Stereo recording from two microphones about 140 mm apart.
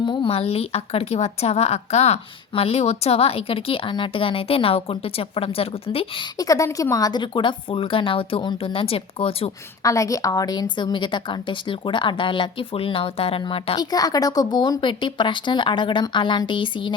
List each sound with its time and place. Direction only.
0.0 s a woman's voice: 35° left (ahead or behind)
6.3 s a woman's voice: 25° left (ahead or behind); by 9.5 s 45° left (ahead or behind)
9.8 s a woman's voice: 25° left (ahead or behind); by 13.7 s 40° left (ahead or behind)
13.7 s a woman's voice: 25° left (ahead or behind)